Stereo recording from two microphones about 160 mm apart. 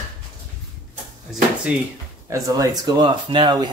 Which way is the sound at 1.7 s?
5° right (ahead or behind).